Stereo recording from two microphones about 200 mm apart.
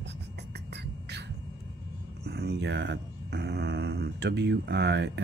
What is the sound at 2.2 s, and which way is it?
Speech, 55° right (ahead or behind).